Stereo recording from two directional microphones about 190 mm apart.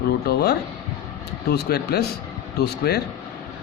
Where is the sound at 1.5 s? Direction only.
55° left (ahead or behind).